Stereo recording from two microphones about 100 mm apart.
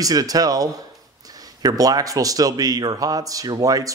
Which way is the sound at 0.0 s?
40° right (ahead or behind).